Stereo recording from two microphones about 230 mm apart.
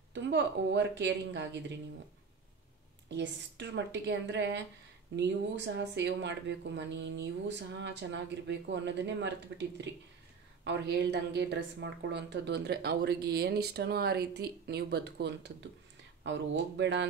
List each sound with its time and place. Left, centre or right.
0.1 s a woman's voice: right
3.1 s a woman's voice: right